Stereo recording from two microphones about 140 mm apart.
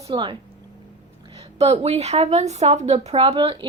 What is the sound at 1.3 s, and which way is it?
A woman's voice, 45° right (ahead or behind).